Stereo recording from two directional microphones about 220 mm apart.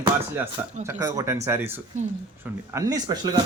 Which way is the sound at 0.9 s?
15° right (ahead or behind).